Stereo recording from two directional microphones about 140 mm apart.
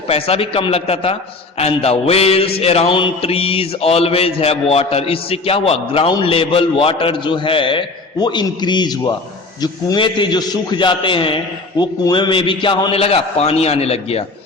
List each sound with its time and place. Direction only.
0.1 s mantra: 45° left (ahead or behind)
6.2 s a man's voice: 40° left (ahead or behind)
11.8 s mantra: 30° left (ahead or behind); by 14.3 s 45° left (ahead or behind)